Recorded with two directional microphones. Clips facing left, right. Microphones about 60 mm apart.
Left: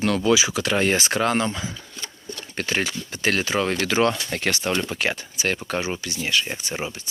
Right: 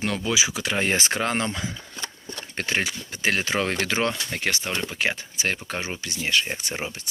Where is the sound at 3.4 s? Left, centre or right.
Right.